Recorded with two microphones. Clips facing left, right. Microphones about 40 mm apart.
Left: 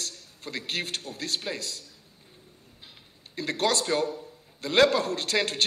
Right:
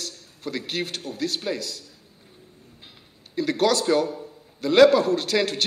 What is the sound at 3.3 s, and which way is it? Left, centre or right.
A man's voice, left.